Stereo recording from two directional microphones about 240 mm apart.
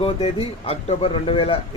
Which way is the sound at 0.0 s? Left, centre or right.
Left.